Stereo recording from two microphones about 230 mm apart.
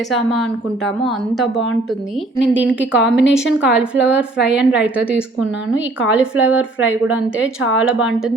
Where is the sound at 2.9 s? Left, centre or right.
Centre.